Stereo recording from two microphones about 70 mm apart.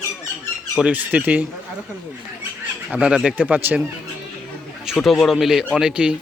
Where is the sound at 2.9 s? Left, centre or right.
Centre.